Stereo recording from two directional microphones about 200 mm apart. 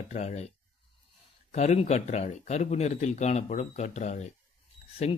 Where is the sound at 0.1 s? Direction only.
35° left (ahead or behind).